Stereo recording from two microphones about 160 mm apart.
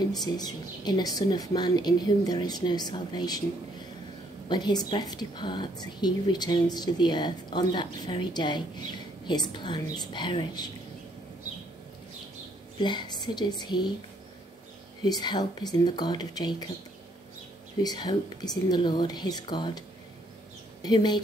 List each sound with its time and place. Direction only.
0.1 s speech: 25° left (ahead or behind)
4.5 s speech: 25° left (ahead or behind)
12.7 s speech: 30° left (ahead or behind)
15.0 s speech: 25° left (ahead or behind)
17.8 s speech: 25° left (ahead or behind)
20.8 s speech: 25° left (ahead or behind)